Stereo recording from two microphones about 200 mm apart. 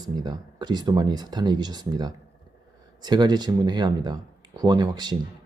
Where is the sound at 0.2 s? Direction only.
20° right (ahead or behind).